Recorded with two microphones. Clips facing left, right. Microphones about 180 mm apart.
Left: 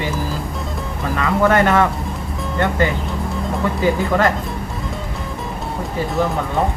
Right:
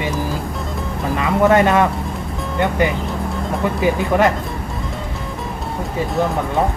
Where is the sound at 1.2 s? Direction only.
20° right (ahead or behind).